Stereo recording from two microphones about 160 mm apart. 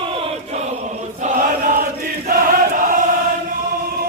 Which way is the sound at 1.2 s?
55° right (ahead or behind).